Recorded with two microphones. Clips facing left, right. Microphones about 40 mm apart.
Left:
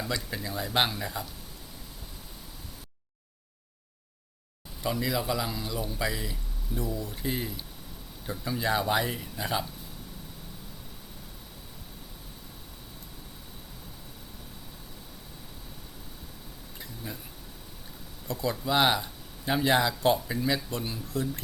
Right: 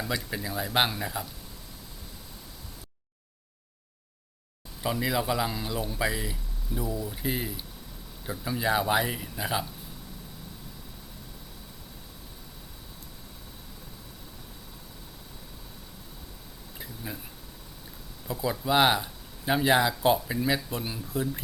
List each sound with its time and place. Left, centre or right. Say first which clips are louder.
0.1 s speech: right 1 dB; centre
4.8 s speech: right 1 dB; centre
16.8 s speech: right 1 dB; centre
18.3 s speech: right 1 dB; centre